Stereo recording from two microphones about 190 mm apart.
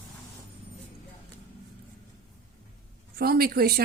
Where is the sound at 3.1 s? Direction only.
55° right (ahead or behind).